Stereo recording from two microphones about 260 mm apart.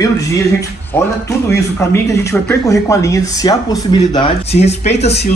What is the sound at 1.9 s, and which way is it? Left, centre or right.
Speech, centre.